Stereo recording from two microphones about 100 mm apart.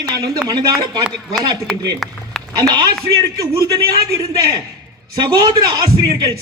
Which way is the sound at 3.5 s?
40° right (ahead or behind).